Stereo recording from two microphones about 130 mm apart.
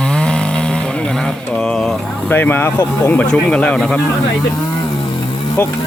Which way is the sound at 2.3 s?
15° left (ahead or behind).